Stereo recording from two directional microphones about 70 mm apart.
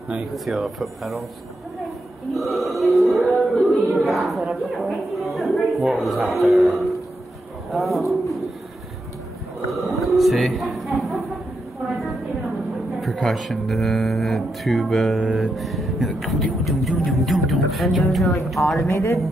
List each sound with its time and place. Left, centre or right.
0.3 s speech: centre
3.0 s music: centre
3.9 s a sound: centre
6.0 s speech: centre
9.7 s speech: centre
11.0 s a sound: centre
13.0 s speech: centre
18.9 s speech: left